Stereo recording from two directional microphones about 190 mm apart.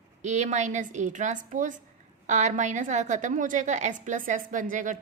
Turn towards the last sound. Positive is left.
turn(degrees=-45)  # may be behind; listen again after turning